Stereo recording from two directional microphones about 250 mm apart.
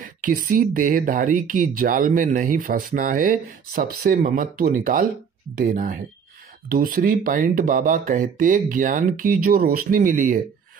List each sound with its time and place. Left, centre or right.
0.0 s speech: right